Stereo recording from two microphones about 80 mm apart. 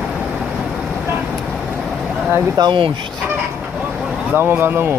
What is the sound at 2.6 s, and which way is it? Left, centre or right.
Speech, right.